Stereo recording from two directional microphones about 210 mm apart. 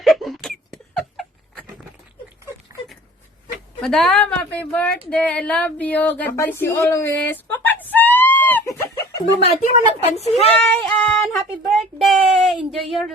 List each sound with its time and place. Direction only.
0.0 s a sound: centre (ahead or behind)
3.8 s a woman's voice: centre (ahead or behind)
5.1 s a sound: 5° left (ahead or behind)
9.5 s a woman's voice: 30° left (ahead or behind)
10.6 s child singing: 5° left (ahead or behind)
11.3 s speech: centre (ahead or behind)